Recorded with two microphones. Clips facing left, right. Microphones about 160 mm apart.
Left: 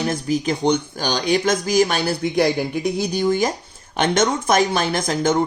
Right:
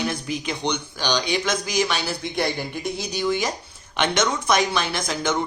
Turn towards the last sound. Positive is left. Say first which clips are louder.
# left 6 dB
turn(degrees=45)  # may be behind; listen again after turning